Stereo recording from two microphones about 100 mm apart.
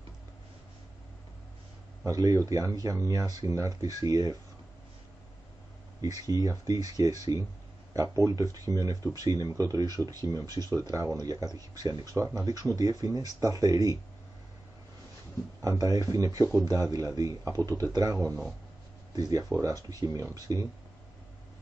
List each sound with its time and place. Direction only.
2.0 s speech: 35° right (ahead or behind)
5.9 s speech: 40° right (ahead or behind)
15.6 s speech: 35° right (ahead or behind)